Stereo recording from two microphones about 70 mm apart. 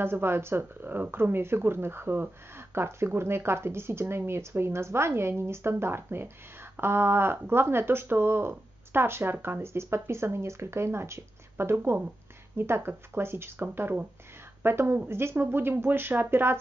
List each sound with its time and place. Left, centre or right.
0.0 s speech: right